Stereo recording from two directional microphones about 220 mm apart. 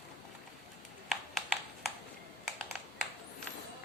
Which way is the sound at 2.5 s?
Centre (ahead or behind).